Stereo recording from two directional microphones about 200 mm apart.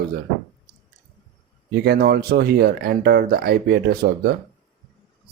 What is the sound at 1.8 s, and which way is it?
Speech, 55° right (ahead or behind).